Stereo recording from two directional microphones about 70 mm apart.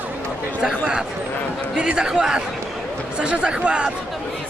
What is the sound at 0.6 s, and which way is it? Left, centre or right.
A man's voice, centre.